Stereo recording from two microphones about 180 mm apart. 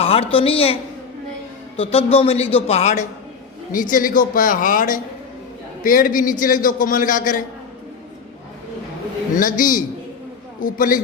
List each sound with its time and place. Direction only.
0.0 s a woman's voice: 30° left (ahead or behind); by 7.4 s 50° left (ahead or behind)
9.3 s a woman's voice: 50° left (ahead or behind)